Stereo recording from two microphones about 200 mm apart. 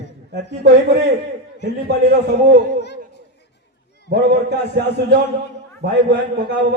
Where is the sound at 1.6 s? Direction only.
55° right (ahead or behind).